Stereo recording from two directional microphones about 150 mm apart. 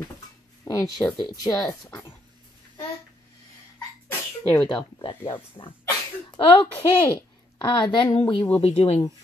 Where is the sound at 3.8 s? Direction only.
15° left (ahead or behind).